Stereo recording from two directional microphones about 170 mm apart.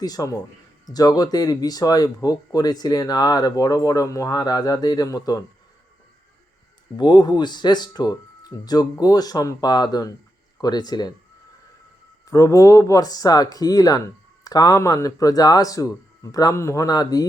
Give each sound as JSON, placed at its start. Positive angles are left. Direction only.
{"t": 0.0, "sound": "speech", "side_deg": 20}
{"t": 6.9, "sound": "speech", "side_deg": 25}
{"t": 12.2, "sound": "speech", "side_deg": 20}